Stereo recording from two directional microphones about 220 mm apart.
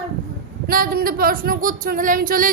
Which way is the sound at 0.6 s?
40° right (ahead or behind).